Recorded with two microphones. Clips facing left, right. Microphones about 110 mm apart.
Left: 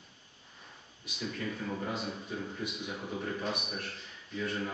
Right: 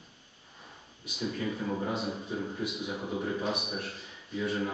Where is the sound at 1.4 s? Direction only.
15° right (ahead or behind).